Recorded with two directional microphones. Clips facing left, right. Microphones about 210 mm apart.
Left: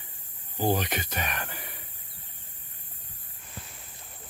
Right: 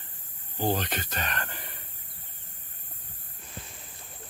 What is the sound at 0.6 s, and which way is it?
Speech, 10° left (ahead or behind).